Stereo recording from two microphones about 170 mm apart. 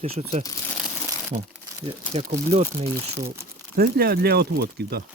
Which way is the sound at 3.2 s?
60° right (ahead or behind).